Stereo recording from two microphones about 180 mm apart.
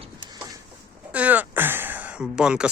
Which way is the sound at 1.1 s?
10° right (ahead or behind).